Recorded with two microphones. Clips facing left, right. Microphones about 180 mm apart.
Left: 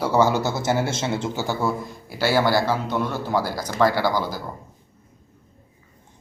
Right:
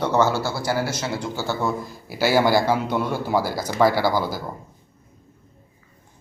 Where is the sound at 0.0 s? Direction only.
10° left (ahead or behind).